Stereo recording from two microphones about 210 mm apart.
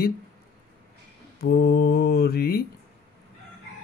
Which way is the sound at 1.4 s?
50° left (ahead or behind).